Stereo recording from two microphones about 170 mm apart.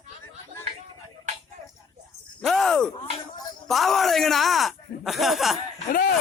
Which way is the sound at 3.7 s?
Centre (ahead or behind).